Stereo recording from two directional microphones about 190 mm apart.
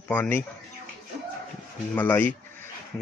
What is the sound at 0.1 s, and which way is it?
Speech, 10° left (ahead or behind).